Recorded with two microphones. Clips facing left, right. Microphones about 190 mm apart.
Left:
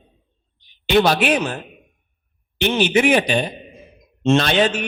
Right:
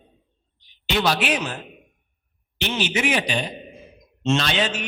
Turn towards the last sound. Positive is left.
turn(degrees=55)  # may be behind; listen again after turning